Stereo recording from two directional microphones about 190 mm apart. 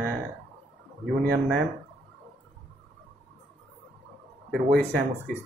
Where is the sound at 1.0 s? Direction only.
Centre (ahead or behind).